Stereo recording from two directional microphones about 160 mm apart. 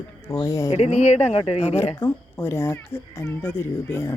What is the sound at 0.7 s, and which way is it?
Speech, 45° left (ahead or behind).